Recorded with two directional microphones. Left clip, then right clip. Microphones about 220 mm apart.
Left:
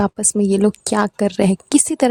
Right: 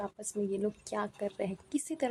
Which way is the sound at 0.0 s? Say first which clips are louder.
Left 17 dB; 40° left (ahead or behind).